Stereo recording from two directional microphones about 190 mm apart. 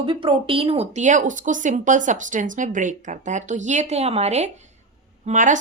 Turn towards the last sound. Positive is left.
turn(degrees=-40)  # may be behind; listen again after turning